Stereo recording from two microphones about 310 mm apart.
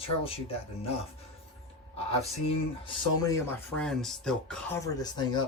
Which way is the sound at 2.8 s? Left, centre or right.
Centre.